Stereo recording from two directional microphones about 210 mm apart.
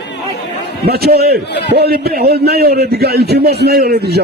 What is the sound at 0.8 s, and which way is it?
A man's voice, 50° right (ahead or behind).